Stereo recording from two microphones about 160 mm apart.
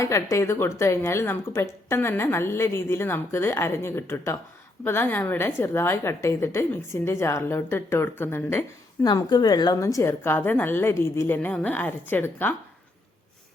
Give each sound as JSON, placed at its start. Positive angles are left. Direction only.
{"t": 0.0, "sound": "speech", "side_deg": 20}
{"t": 9.0, "sound": "speech", "side_deg": 25}